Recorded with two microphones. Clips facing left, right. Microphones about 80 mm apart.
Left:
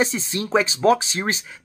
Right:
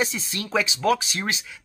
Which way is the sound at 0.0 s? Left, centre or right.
Left.